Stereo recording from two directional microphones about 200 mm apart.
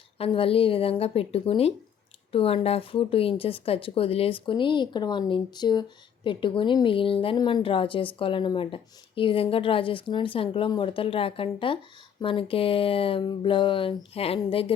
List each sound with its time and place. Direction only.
0.2 s a woman's voice: 30° left (ahead or behind)